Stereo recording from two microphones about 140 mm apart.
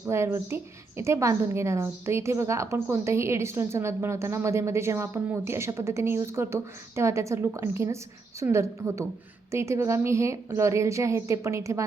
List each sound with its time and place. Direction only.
0.0 s a woman's voice: 15° right (ahead or behind)